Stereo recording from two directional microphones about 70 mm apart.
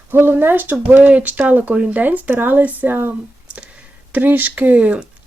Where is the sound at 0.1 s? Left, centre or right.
Right.